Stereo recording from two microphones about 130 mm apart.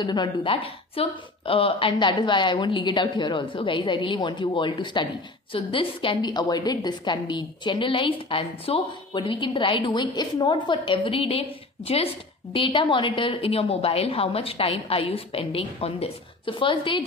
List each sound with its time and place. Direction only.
0.0 s a woman's voice: 35° left (ahead or behind)